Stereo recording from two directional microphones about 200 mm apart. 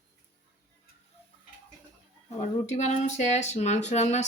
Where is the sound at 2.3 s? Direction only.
35° left (ahead or behind).